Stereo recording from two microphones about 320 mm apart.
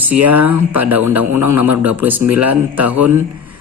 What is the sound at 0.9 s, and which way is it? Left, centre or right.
Speech, right.